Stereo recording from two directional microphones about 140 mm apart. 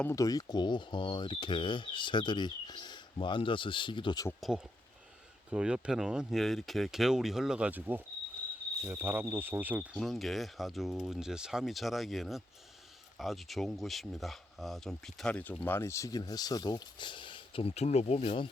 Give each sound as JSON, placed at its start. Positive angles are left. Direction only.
{"t": 0.0, "sound": "speech", "side_deg": 20}
{"t": 4.4, "sound": "speech", "side_deg": 0}
{"t": 8.9, "sound": "cricket", "side_deg": -15}
{"t": 9.9, "sound": "speech", "side_deg": 0}